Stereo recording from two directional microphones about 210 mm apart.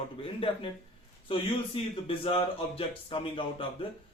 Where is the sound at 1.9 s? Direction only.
25° left (ahead or behind).